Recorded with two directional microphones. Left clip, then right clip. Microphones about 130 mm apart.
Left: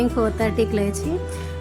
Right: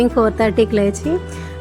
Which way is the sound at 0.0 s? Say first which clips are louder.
Right 6 dB; 25° right (ahead or behind).